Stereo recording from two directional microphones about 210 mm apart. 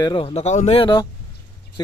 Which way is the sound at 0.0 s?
25° left (ahead or behind).